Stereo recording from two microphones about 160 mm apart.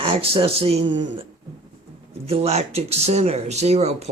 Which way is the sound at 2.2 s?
40° right (ahead or behind).